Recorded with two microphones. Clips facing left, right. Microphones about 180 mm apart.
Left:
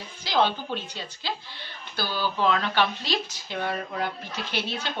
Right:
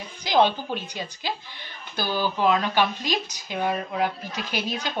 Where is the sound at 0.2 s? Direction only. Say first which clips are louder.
Right 4 dB; 15° right (ahead or behind).